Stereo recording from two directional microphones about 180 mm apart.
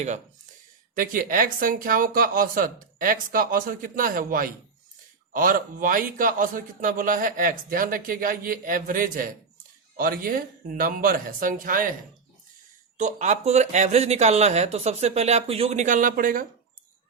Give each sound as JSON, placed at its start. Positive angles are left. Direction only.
{"t": 0.9, "sound": "speech", "side_deg": -50}
{"t": 13.0, "sound": "speech", "side_deg": -40}